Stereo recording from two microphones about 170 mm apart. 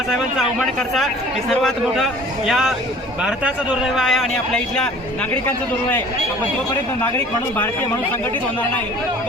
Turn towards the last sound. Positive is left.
turn(degrees=10)  # may be behind; listen again after turning